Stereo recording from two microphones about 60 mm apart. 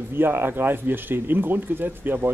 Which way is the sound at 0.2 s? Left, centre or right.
Right.